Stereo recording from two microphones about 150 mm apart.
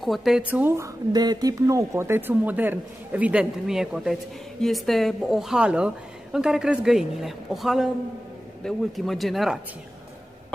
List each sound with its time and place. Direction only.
0.0 s speech: centre (ahead or behind)
1.1 s speech: 25° right (ahead or behind); by 9.6 s centre (ahead or behind)